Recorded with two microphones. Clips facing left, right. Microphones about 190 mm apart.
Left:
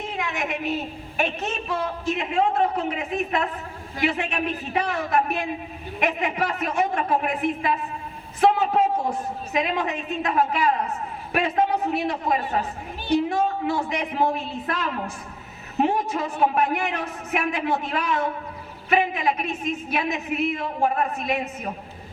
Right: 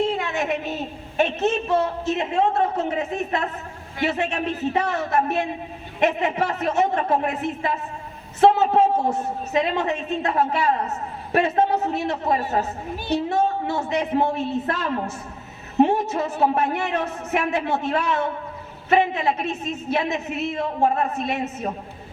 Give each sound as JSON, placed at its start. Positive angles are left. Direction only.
{"t": 0.3, "sound": "a woman's voice", "side_deg": -25}